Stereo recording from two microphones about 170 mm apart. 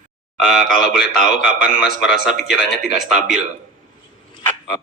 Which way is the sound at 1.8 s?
Centre (ahead or behind).